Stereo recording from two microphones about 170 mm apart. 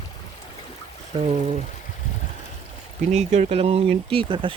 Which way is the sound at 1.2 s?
40° right (ahead or behind).